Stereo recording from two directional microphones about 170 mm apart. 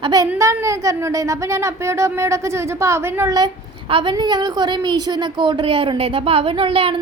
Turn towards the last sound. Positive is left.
turn(degrees=-35)  # may be behind; listen again after turning